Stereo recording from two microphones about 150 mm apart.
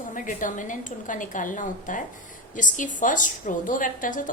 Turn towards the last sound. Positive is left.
turn(degrees=60)  # may be behind; listen again after turning